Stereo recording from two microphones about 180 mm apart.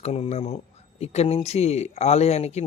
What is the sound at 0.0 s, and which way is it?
Speech, 35° left (ahead or behind).